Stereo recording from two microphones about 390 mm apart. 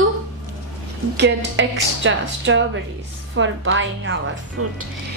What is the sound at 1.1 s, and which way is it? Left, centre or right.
Speech, right.